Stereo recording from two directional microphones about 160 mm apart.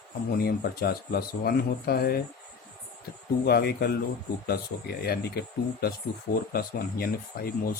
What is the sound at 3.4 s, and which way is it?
Speech, 80° left.